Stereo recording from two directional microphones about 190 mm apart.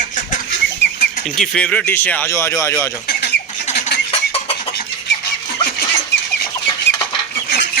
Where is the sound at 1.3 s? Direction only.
5° left (ahead or behind).